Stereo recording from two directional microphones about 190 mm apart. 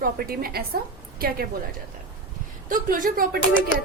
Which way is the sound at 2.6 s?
45° right (ahead or behind).